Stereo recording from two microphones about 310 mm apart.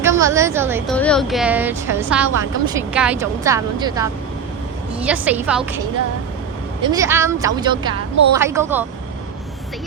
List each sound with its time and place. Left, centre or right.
0.0 s a woman's voice: centre
0.9 s a woman's voice: centre
6.8 s speech: centre